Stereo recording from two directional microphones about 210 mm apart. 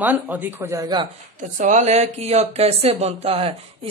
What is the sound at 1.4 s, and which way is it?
Speech, 35° right (ahead or behind).